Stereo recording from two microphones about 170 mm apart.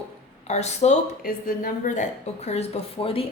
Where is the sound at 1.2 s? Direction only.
55° left (ahead or behind).